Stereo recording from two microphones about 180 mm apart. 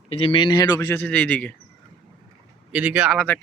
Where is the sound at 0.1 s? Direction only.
30° left (ahead or behind); by 1.5 s 10° left (ahead or behind).